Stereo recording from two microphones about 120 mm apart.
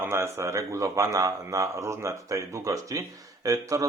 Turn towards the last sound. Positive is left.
turn(degrees=-30)  # may be behind; listen again after turning